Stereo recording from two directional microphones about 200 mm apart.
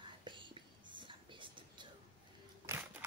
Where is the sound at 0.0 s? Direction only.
25° right (ahead or behind).